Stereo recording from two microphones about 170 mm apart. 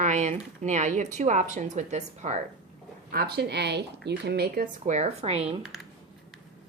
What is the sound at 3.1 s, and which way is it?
A woman's voice, 65° right (ahead or behind).